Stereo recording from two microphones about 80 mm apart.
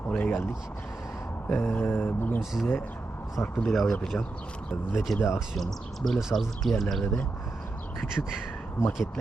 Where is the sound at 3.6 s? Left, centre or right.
Centre.